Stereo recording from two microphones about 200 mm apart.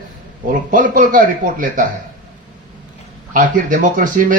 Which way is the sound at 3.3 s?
40° right (ahead or behind).